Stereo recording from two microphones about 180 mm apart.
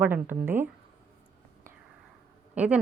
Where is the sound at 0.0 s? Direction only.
10° right (ahead or behind).